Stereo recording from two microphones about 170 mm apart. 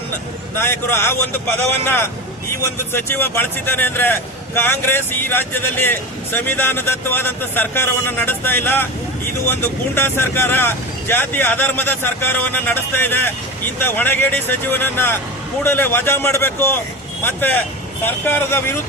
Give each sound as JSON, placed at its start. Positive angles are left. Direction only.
{"t": 0.5, "sound": "speech", "side_deg": 15}